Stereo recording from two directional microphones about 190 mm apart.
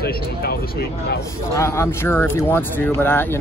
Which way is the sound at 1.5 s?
15° left (ahead or behind).